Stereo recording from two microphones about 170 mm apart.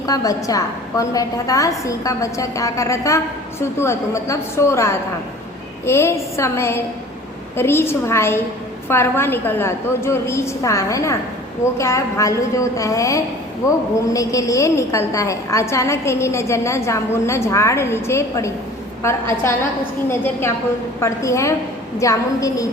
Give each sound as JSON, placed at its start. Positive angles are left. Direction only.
{"t": 0.0, "sound": "a woman's voice", "side_deg": 20}
{"t": 21.0, "sound": "a woman's voice", "side_deg": 15}